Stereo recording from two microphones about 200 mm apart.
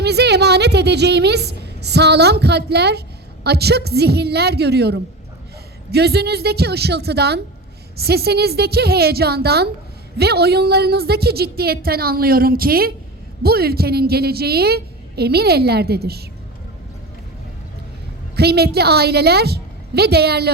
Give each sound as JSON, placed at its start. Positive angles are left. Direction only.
{"t": 0.0, "sound": "a woman's voice", "side_deg": -55}
{"t": 18.3, "sound": "a woman's voice", "side_deg": -55}